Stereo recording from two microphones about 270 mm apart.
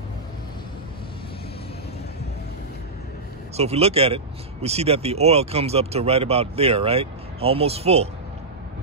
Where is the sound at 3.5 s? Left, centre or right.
Right.